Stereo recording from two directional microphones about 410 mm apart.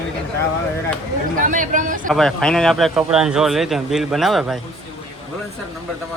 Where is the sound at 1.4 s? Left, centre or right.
Centre.